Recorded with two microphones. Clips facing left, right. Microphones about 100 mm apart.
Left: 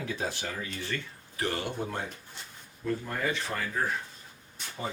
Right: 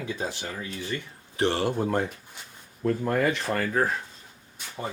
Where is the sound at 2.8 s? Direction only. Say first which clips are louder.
Right 7 dB; 55° right (ahead or behind).